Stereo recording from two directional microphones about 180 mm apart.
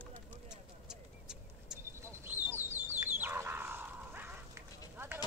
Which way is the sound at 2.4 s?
10° right (ahead or behind).